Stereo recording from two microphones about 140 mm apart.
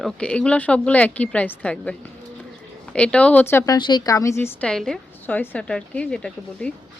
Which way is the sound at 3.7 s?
35° left (ahead or behind).